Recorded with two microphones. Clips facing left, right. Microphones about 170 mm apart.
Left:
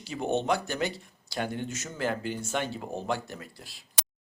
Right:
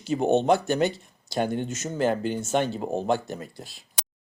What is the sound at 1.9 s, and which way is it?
Speech, 35° right (ahead or behind).